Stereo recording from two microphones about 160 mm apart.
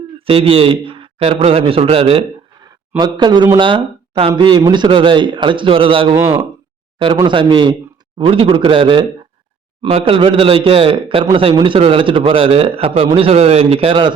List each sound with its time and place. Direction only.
0.3 s speech: 35° right (ahead or behind)